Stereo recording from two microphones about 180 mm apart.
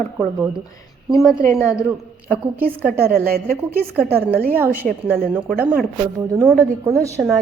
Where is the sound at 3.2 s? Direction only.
55° right (ahead or behind).